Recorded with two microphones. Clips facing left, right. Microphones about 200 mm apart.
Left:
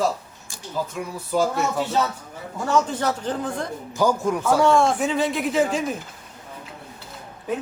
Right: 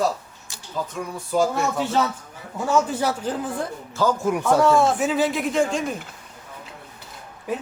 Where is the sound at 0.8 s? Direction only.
10° left (ahead or behind).